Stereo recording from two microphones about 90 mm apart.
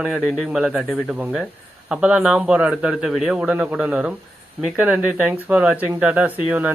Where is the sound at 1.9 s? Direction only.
10° right (ahead or behind).